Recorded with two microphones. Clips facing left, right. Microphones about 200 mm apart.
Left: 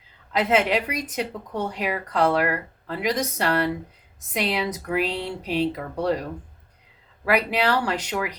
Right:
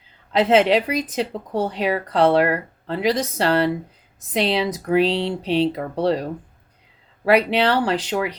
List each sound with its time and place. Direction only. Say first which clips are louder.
0.3 s a woman's voice: right 5 dB; 30° right (ahead or behind)